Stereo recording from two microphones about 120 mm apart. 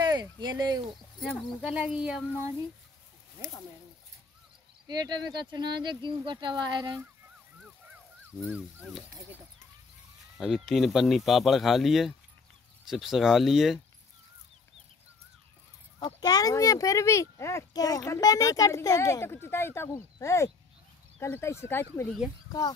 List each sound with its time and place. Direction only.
0.0 s a sound: 35° right (ahead or behind)
1.6 s speech: 10° right (ahead or behind)
4.8 s speech: 35° right (ahead or behind)
8.5 s speech: 10° right (ahead or behind)
10.3 s speech: centre (ahead or behind)
16.2 s speech: 35° left (ahead or behind)